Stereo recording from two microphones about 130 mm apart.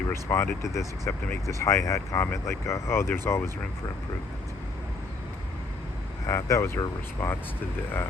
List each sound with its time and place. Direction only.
0.1 s speech: 20° left (ahead or behind)
6.2 s speech: 20° left (ahead or behind)